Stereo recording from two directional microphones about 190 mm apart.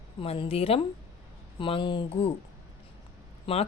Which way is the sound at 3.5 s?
30° left (ahead or behind).